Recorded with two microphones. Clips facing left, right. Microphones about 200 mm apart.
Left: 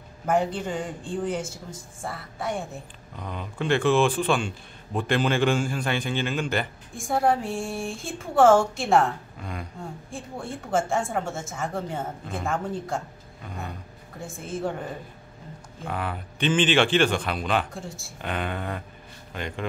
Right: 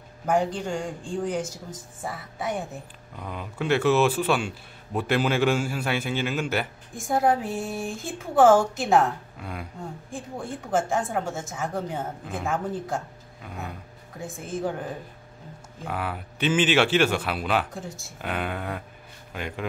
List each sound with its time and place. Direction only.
0.3 s a woman's voice: centre (ahead or behind)
1.4 s a woman's voice: 15° right (ahead or behind)
2.0 s a woman's voice: centre (ahead or behind)